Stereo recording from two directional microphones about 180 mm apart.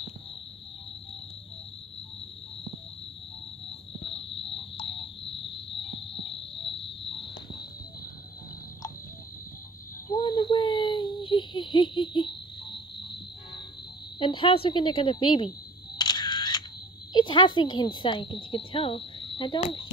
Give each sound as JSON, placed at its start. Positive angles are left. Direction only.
{"t": 4.0, "sound": "cricket", "side_deg": 30}
{"t": 10.0, "sound": "a sound", "side_deg": 25}
{"t": 14.2, "sound": "speech", "side_deg": 30}
{"t": 16.0, "sound": "camera", "side_deg": 25}
{"t": 17.1, "sound": "speech", "side_deg": 25}